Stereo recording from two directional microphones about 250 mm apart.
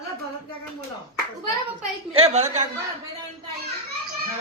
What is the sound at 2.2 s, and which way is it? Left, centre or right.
Speech, right.